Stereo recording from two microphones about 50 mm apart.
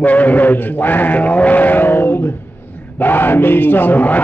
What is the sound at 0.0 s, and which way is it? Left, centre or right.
Speech, left.